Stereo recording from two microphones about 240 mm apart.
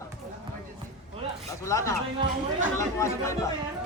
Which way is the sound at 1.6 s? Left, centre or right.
Centre.